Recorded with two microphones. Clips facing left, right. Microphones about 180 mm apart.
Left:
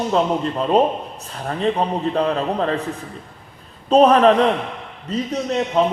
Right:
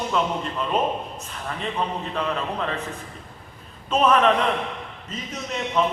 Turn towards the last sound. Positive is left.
turn(degrees=35)  # may be behind; listen again after turning